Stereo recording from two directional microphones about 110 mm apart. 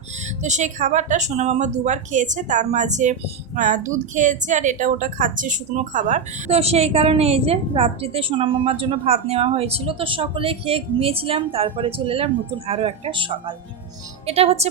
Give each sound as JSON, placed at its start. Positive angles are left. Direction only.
{"t": 0.4, "sound": "a woman's voice", "side_deg": -90}
{"t": 14.3, "sound": "a woman's voice", "side_deg": -65}